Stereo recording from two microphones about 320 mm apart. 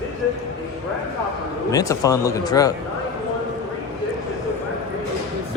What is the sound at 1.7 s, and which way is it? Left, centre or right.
Speech, centre.